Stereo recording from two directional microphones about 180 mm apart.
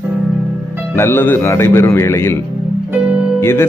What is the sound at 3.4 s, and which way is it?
Speech, 15° left (ahead or behind).